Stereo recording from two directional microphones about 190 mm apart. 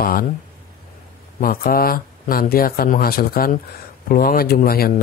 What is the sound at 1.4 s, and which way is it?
Speech, 50° left (ahead or behind).